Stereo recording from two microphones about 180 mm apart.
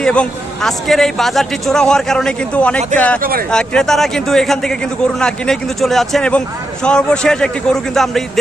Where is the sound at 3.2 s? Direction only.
55° right (ahead or behind).